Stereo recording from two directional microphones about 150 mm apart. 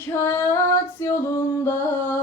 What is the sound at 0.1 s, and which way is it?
Female singing, 15° left (ahead or behind).